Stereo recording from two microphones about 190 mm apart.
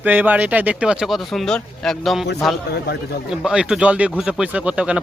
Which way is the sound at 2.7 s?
60° left (ahead or behind).